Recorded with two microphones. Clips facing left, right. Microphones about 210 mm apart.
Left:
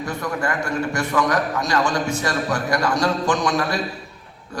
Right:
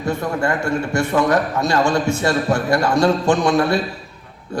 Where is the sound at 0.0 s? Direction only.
25° right (ahead or behind).